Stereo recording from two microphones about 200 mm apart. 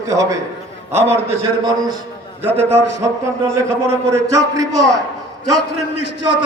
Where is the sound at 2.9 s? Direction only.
35° right (ahead or behind).